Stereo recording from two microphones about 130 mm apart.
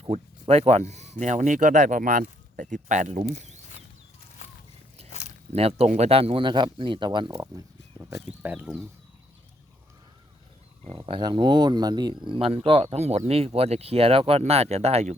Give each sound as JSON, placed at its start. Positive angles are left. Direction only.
{"t": 0.0, "sound": "speech", "side_deg": -55}
{"t": 3.2, "sound": "speech", "side_deg": -60}
{"t": 5.5, "sound": "speech", "side_deg": -50}
{"t": 7.9, "sound": "speech", "side_deg": -20}
{"t": 10.9, "sound": "speech", "side_deg": -35}
{"t": 12.3, "sound": "speech", "side_deg": -45}